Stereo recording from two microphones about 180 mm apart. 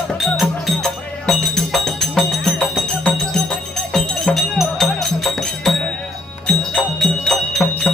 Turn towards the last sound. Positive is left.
turn(degrees=5)  # may be behind; listen again after turning